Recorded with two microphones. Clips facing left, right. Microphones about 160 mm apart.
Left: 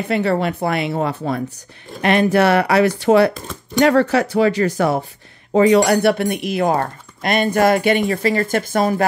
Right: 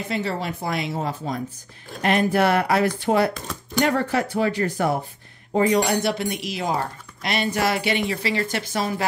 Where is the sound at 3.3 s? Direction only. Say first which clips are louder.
Left 2 dB; centre (ahead or behind).